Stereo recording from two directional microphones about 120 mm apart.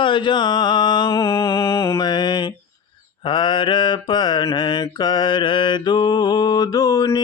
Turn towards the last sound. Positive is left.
turn(degrees=30)  # may be behind; listen again after turning